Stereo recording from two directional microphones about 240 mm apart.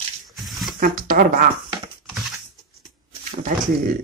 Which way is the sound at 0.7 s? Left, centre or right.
Right.